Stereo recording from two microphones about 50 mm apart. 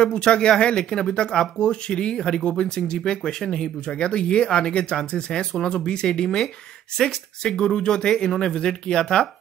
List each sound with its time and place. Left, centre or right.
0.0 s speech: centre